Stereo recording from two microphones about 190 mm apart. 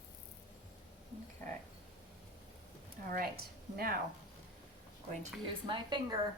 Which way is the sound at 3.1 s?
50° right (ahead or behind).